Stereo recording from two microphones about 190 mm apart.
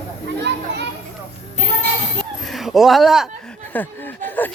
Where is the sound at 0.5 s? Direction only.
60° right (ahead or behind).